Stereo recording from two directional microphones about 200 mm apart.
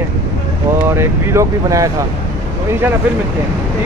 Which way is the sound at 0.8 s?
10° right (ahead or behind).